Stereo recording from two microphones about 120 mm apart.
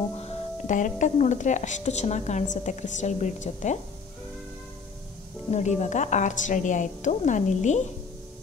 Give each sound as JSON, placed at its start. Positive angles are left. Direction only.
{"t": 0.1, "sound": "speech", "side_deg": 60}
{"t": 5.5, "sound": "speech", "side_deg": 75}